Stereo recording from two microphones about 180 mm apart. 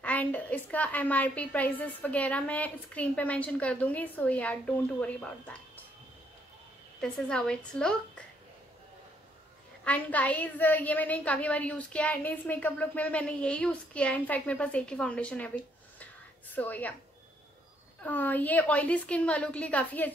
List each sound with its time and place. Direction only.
0.0 s a woman's voice: 10° left (ahead or behind)
7.0 s a woman's voice: 5° left (ahead or behind)
9.8 s a woman's voice: 10° left (ahead or behind)
18.0 s a woman's voice: 10° left (ahead or behind)